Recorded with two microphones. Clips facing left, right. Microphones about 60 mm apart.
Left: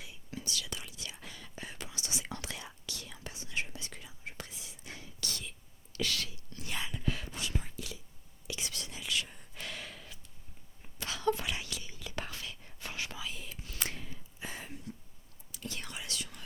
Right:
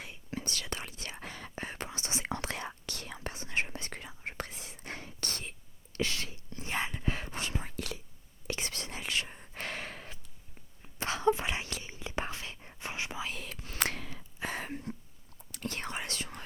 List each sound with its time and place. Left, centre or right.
0.3 s whispering: right
7.8 s whispering: right
8.4 s whispering: right
10.9 s a sound: right
11.3 s whispering: right
13.3 s whispering: right
13.7 s a sound: right
14.7 s a sound: right
15.5 s whispering: right